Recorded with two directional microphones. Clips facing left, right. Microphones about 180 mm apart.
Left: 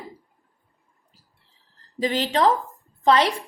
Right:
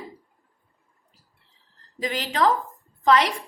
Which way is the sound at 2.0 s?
30° left (ahead or behind).